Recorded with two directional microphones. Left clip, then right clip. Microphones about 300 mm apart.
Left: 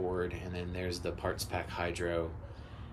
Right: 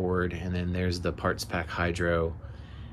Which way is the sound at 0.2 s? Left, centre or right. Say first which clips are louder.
Right 5 dB; centre.